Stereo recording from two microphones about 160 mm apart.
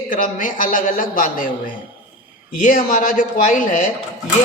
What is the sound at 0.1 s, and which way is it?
A woman's voice, 55° left (ahead or behind).